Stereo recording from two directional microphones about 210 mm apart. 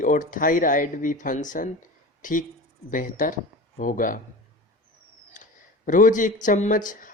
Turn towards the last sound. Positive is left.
turn(degrees=40)  # may be behind; listen again after turning